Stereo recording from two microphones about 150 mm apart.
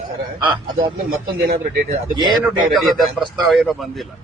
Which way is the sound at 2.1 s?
30° right (ahead or behind).